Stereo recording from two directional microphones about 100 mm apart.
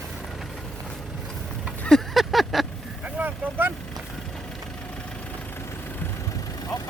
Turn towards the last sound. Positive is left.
turn(degrees=40)  # may be behind; listen again after turning